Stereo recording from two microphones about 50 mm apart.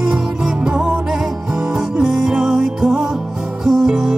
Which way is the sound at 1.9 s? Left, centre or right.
Centre.